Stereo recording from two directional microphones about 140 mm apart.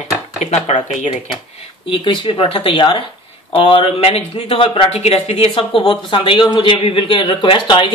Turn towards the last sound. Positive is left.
turn(degrees=35)  # may be behind; listen again after turning